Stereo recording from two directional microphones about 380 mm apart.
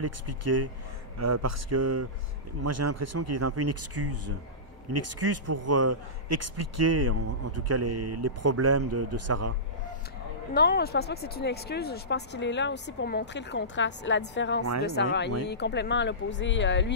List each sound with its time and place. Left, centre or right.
0.0 s a man's voice: right
10.5 s speech: left